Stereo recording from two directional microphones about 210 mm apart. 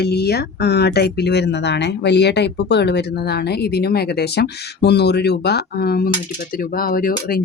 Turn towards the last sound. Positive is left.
turn(degrees=45)  # may be behind; listen again after turning